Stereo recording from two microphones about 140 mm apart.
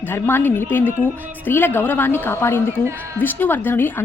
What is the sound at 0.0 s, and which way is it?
A woman's voice, 15° left (ahead or behind).